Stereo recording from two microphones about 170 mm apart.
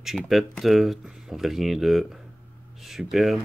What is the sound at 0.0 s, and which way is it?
Speech, centre (ahead or behind).